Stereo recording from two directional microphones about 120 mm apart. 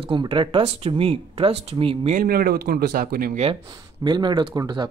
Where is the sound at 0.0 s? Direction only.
45° right (ahead or behind).